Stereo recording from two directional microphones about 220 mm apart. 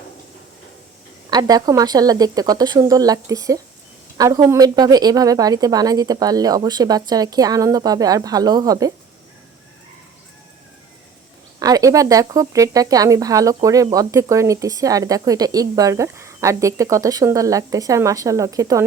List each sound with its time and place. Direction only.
1.3 s speech: 15° right (ahead or behind)
11.6 s speech: 15° right (ahead or behind)